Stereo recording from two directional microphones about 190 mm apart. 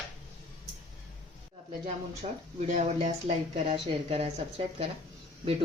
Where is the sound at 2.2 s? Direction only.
35° right (ahead or behind).